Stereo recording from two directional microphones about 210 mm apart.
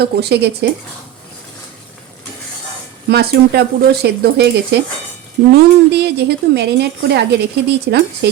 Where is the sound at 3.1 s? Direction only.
50° right (ahead or behind).